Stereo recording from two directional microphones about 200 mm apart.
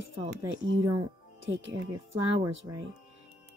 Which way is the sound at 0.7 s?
20° right (ahead or behind).